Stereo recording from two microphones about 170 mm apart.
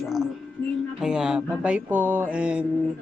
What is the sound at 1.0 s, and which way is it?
Music, 5° right (ahead or behind).